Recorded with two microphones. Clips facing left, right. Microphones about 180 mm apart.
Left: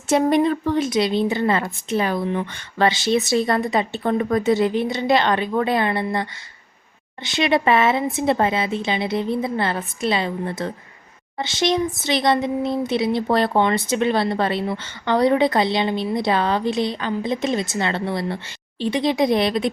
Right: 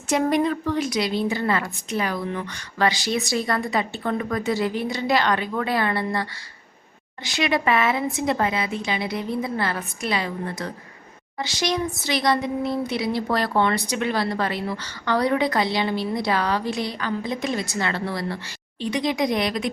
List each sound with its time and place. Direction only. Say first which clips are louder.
0.1 s a woman's voice: left 4 dB; 25° left (ahead or behind)